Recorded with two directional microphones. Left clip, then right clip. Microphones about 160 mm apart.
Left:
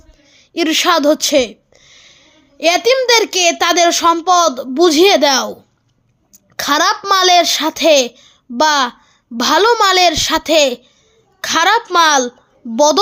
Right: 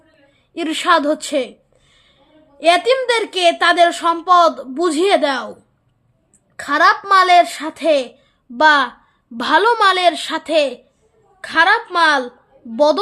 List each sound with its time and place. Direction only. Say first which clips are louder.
0.3 s a woman's voice: left 7 dB; 40° left (ahead or behind)
6.6 s a woman's voice: even; 50° left (ahead or behind)
8.5 s a woman's voice: right 1 dB; 35° left (ahead or behind)